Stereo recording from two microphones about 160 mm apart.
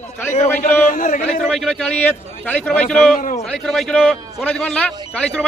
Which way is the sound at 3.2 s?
55° left (ahead or behind).